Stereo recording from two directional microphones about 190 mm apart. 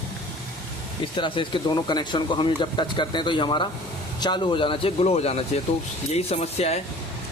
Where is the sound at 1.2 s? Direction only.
25° left (ahead or behind).